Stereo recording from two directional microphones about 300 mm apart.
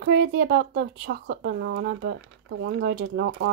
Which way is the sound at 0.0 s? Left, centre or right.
Right.